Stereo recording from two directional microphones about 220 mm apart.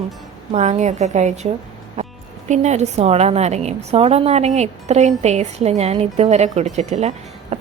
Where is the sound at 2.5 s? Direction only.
30° right (ahead or behind).